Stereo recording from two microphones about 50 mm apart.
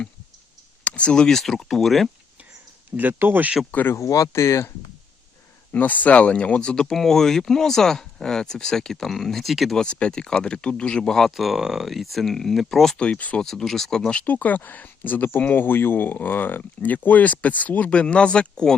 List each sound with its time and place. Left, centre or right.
0.9 s speech: left; by 2.0 s centre
3.0 s speech: right
3.9 s speech: left
5.7 s speech: left; by 9.7 s centre
9.7 s speech: left
11.3 s speech: centre
13.0 s speech: left
13.4 s speech: centre
14.3 s speech: left
18.0 s speech: centre